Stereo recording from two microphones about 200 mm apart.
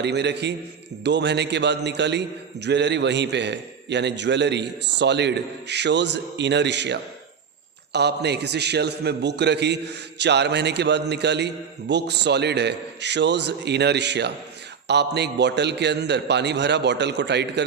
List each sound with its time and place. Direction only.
0.0 s a man's voice: 60° right (ahead or behind)